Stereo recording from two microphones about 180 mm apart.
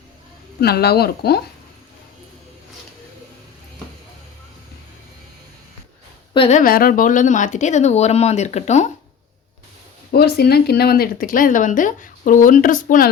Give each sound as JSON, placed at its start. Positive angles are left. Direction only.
{"t": 0.6, "sound": "speech", "side_deg": 60}
{"t": 6.3, "sound": "speech", "side_deg": 30}
{"t": 6.6, "sound": "speech", "side_deg": 55}
{"t": 10.1, "sound": "speech", "side_deg": 60}